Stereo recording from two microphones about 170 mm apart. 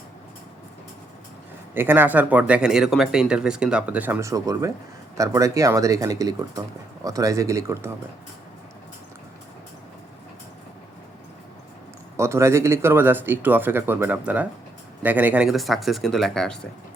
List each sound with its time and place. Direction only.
1.7 s speech: 10° right (ahead or behind)
12.1 s speech: 15° right (ahead or behind); by 16.6 s 5° left (ahead or behind)